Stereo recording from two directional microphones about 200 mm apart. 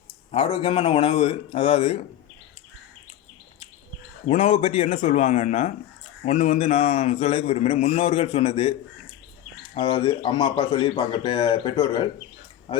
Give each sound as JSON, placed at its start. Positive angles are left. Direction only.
{"t": 0.3, "sound": "a man's voice", "side_deg": 30}
{"t": 4.3, "sound": "a man's voice", "side_deg": 35}
{"t": 9.7, "sound": "a man's voice", "side_deg": 25}